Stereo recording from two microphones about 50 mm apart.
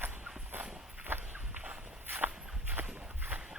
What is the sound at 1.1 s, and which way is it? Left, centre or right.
Walk, right.